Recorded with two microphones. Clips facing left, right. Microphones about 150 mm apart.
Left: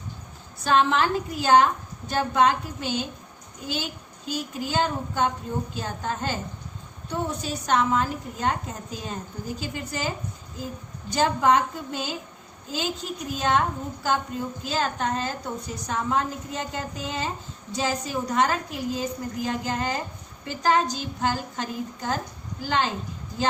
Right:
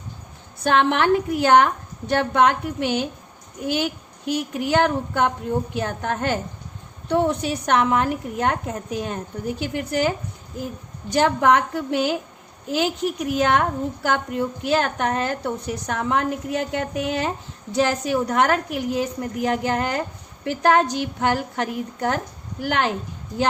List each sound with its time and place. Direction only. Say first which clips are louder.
0.6 s a woman's voice: right 3 dB; 65° right (ahead or behind)
4.3 s a woman's voice: right 7 dB; 65° right (ahead or behind)
11.1 s a woman's voice: right 3 dB; 65° right (ahead or behind)